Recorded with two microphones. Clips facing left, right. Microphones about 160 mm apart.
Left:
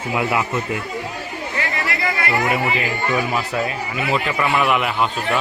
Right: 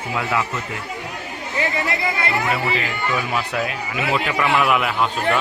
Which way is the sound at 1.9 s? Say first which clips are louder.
Even; 20° right (ahead or behind).